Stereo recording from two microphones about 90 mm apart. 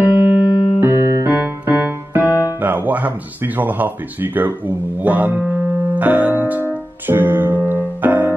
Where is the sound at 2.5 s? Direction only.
20° right (ahead or behind).